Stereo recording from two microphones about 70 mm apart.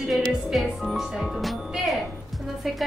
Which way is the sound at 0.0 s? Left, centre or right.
Centre.